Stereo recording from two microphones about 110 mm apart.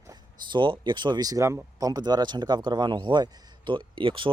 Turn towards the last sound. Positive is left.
turn(degrees=-50)  # may be behind; listen again after turning